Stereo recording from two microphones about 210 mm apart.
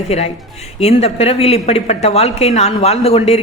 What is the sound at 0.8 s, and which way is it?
A woman's voice, 30° left (ahead or behind).